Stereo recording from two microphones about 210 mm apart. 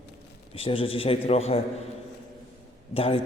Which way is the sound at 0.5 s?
25° left (ahead or behind).